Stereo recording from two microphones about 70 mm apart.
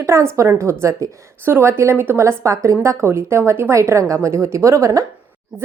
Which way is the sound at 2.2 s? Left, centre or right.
Right.